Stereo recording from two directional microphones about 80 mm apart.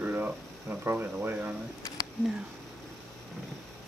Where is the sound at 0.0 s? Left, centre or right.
Right.